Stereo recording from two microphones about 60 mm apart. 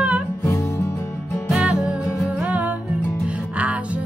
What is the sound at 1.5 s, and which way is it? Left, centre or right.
Music, centre.